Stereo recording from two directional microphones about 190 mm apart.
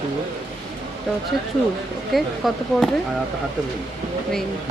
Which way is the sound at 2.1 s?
Centre (ahead or behind).